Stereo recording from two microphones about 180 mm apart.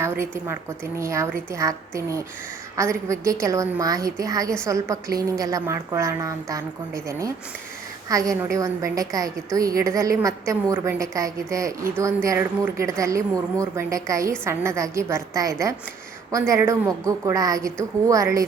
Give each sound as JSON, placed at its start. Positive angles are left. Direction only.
{"t": 0.0, "sound": "a woman's voice", "side_deg": -15}